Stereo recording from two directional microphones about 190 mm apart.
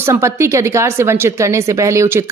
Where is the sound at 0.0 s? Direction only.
15° right (ahead or behind).